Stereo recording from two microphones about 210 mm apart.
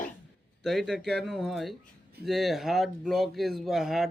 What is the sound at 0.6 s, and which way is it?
Speech, centre (ahead or behind).